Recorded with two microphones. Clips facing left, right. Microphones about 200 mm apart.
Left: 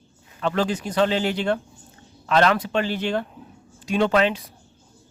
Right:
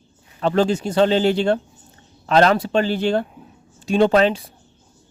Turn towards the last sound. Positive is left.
turn(degrees=-35)  # may be behind; listen again after turning